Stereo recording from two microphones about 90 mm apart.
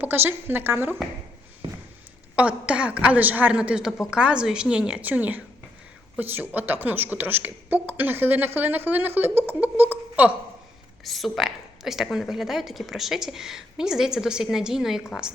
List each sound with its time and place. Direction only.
0.0 s speech: 20° right (ahead or behind)
1.6 s a sound: 65° right (ahead or behind)
2.3 s a woman's voice: 15° right (ahead or behind)
11.0 s a woman's voice: centre (ahead or behind)